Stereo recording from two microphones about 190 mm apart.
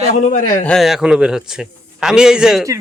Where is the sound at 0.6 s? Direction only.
Centre (ahead or behind).